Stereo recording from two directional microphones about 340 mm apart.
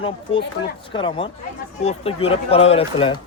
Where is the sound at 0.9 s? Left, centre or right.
Centre.